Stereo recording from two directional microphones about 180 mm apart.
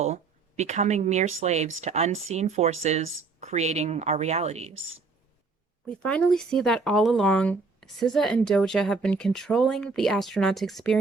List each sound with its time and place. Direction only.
0.0 s speech: 40° right (ahead or behind)
6.0 s speech: 5° left (ahead or behind)